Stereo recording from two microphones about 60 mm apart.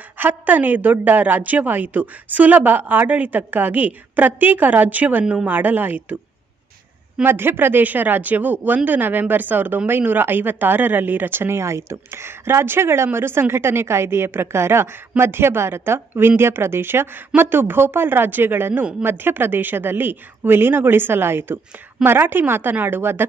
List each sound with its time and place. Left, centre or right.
0.2 s a woman's voice: right
5.2 s speech: centre
5.5 s a woman's voice: right
7.2 s a woman's voice: right